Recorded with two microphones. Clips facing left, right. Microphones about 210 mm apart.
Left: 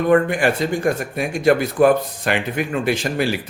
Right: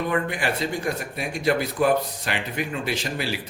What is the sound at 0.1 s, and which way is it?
Speech, 50° left (ahead or behind).